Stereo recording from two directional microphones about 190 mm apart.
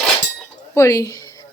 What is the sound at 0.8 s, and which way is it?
Speech, 15° left (ahead or behind).